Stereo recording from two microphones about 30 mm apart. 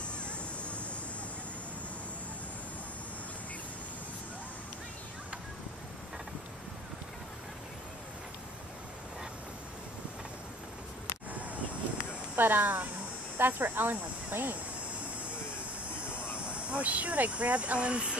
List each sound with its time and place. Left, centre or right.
11.3 s a sound: right
12.4 s speech: right
13.4 s speech: right
16.0 s speech: right